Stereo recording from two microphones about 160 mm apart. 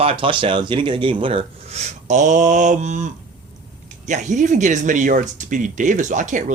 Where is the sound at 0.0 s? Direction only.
35° right (ahead or behind).